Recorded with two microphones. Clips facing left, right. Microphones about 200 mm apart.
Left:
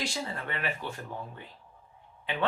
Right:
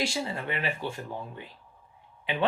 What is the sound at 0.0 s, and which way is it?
Speech, 15° right (ahead or behind).